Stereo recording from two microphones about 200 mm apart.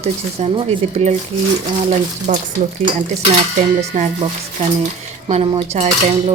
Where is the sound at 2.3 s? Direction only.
35° right (ahead or behind).